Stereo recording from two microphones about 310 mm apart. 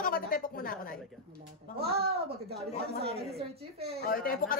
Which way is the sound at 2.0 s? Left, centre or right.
Right.